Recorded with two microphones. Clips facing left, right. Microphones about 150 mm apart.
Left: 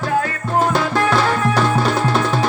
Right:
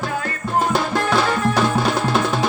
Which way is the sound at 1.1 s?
10° right (ahead or behind).